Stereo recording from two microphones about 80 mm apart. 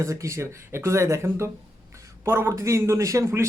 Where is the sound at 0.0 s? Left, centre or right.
Right.